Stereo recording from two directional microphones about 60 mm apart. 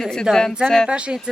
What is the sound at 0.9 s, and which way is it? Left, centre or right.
Speech, centre.